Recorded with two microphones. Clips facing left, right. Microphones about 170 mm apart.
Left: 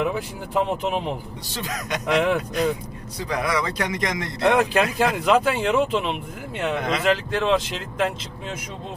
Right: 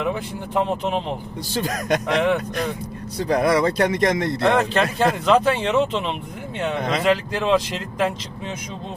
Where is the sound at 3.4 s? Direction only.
50° right (ahead or behind).